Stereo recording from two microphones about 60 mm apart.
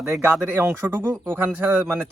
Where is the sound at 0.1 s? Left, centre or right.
Right.